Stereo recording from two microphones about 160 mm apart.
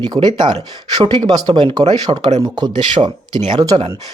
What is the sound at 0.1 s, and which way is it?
Speech, 25° right (ahead or behind).